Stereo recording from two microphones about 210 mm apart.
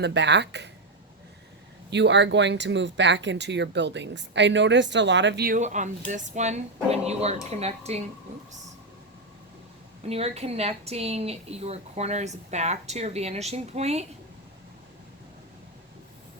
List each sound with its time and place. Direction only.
0.0 s speech: 55° right (ahead or behind)
1.9 s speech: 55° right (ahead or behind)
5.5 s a woman's voice: 35° right (ahead or behind)
10.1 s a woman's voice: 30° right (ahead or behind)